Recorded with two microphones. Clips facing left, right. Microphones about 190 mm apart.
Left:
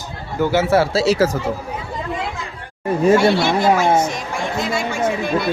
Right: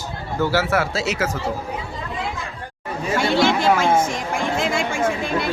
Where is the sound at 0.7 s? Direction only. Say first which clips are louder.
Left 6 dB; 30° left (ahead or behind).